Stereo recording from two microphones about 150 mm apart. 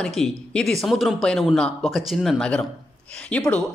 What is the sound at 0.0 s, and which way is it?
Speech, 5° left (ahead or behind).